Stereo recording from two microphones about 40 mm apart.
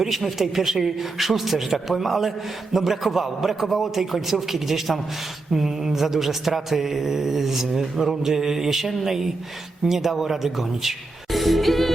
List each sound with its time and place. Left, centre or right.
0.2 s a man's voice: centre